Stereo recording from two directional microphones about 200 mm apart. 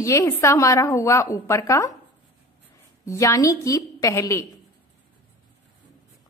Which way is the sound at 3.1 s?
15° left (ahead or behind).